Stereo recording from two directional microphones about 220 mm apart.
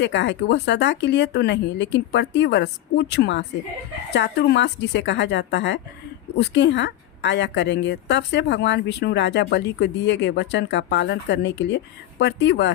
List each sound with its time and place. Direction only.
0.0 s a woman's voice: 55° left (ahead or behind)